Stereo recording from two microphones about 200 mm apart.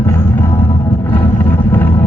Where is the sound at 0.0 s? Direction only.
10° left (ahead or behind).